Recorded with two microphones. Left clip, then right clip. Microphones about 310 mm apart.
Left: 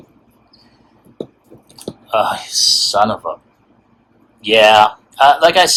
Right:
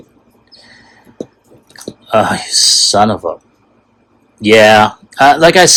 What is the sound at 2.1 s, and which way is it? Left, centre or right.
Speech, right.